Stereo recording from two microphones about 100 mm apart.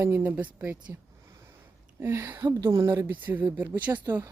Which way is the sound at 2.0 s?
20° right (ahead or behind).